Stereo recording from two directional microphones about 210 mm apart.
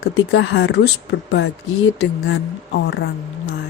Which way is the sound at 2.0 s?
60° left (ahead or behind).